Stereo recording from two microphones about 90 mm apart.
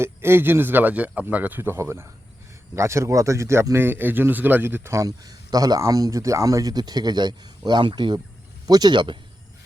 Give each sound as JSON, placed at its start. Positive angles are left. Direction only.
{"t": 0.0, "sound": "speech", "side_deg": -25}
{"t": 4.9, "sound": "speech", "side_deg": -45}